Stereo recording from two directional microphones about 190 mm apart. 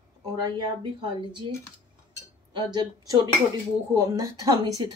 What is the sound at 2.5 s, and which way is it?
A woman's voice, 25° right (ahead or behind).